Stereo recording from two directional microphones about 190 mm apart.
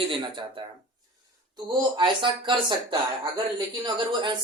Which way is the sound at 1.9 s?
25° right (ahead or behind).